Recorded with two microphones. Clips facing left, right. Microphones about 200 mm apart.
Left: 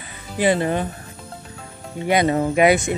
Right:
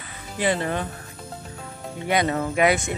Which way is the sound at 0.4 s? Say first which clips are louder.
Left 5 dB; 20° left (ahead or behind).